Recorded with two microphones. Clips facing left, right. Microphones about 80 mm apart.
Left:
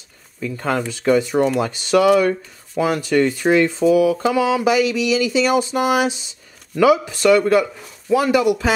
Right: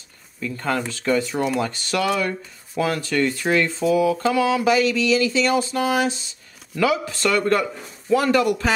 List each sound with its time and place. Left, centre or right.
0.4 s speech: centre